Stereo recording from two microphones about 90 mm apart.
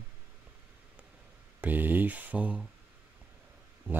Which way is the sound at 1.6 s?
20° right (ahead or behind).